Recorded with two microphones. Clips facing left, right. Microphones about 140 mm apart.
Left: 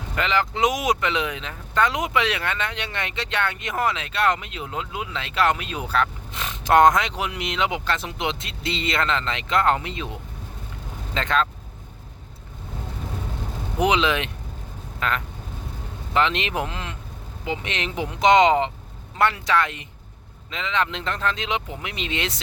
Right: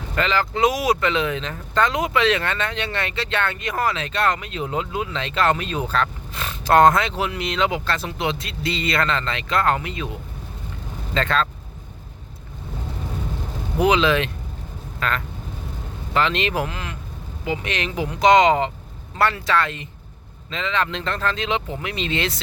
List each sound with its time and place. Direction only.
0.2 s speech: 20° left (ahead or behind)
4.6 s speech: centre (ahead or behind)
4.9 s speech: 10° left (ahead or behind)
13.7 s speech: 20° left (ahead or behind)